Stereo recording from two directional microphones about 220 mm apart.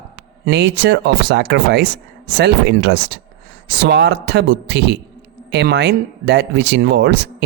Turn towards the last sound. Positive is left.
turn(degrees=-50)  # may be behind; listen again after turning